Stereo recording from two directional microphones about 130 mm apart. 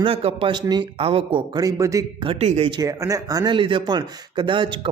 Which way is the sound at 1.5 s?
30° right (ahead or behind).